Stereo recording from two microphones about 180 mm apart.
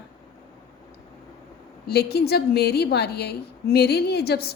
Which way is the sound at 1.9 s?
60° left (ahead or behind).